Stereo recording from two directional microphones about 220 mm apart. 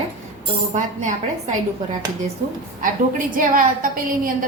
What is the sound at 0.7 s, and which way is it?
Speech, 35° right (ahead or behind).